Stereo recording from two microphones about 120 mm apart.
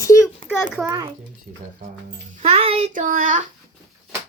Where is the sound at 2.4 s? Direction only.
55° right (ahead or behind).